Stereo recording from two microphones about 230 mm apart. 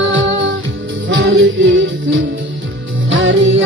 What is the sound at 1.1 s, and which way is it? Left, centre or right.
Music, right.